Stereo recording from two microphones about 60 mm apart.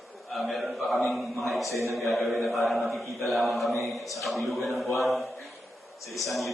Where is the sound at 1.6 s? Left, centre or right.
Right.